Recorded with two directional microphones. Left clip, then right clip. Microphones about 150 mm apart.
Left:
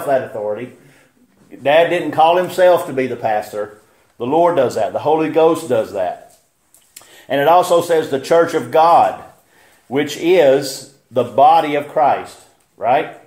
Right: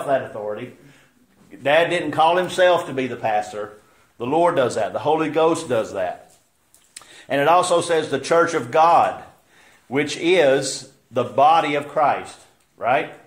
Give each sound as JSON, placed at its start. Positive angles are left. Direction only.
{"t": 1.5, "sound": "a man's voice", "side_deg": 20}
{"t": 3.0, "sound": "speech", "side_deg": 35}
{"t": 3.6, "sound": "a man's voice", "side_deg": 15}